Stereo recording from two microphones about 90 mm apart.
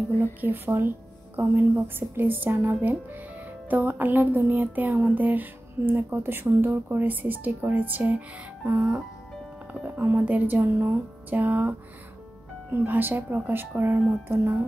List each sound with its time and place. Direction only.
0.2 s speech: 25° right (ahead or behind)
8.6 s speech: 30° right (ahead or behind)
10.2 s speech: 20° right (ahead or behind)
12.7 s speech: 20° right (ahead or behind)